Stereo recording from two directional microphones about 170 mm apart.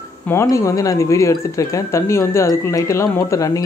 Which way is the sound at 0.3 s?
15° left (ahead or behind).